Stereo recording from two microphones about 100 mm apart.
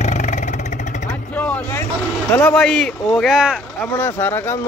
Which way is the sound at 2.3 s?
10° left (ahead or behind).